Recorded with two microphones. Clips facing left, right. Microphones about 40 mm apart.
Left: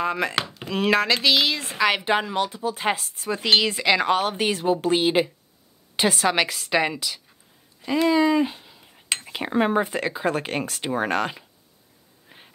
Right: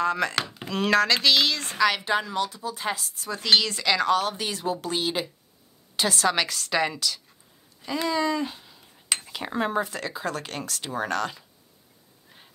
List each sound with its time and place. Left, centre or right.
0.0 s speech: centre
1.8 s speech: left
12.3 s a sound: left